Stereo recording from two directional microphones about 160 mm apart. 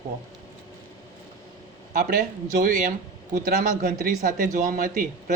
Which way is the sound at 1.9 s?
55° right (ahead or behind).